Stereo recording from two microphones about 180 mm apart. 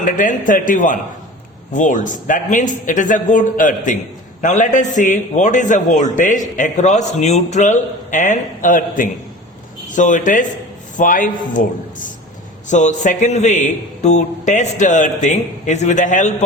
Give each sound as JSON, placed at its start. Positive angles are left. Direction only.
{"t": 0.0, "sound": "a man's voice", "side_deg": 45}